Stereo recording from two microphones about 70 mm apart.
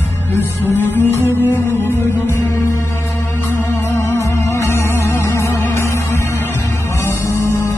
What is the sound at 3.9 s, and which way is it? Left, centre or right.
Music, left.